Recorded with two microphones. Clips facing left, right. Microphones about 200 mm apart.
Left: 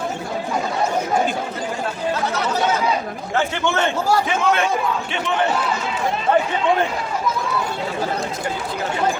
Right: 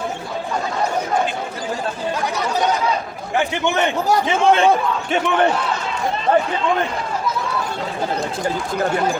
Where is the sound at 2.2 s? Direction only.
15° right (ahead or behind).